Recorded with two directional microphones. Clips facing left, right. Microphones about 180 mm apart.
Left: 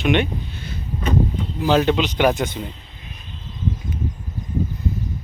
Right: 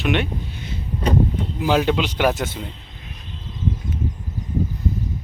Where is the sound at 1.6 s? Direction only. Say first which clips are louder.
Left 2 dB; 10° right (ahead or behind).